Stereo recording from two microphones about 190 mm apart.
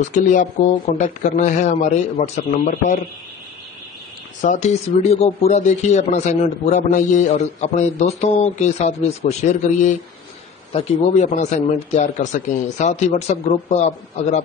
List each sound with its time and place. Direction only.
0.1 s speech: 40° left (ahead or behind)
4.4 s speech: 40° left (ahead or behind)